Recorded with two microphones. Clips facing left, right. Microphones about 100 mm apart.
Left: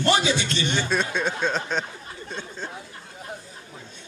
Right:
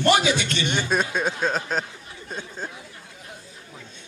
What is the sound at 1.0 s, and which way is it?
Speech, 5° right (ahead or behind).